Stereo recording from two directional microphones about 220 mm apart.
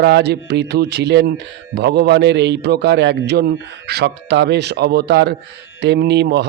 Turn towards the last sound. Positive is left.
turn(degrees=-50)  # may be behind; listen again after turning